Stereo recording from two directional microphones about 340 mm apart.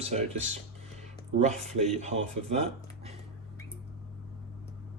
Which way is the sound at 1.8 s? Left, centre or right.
Centre.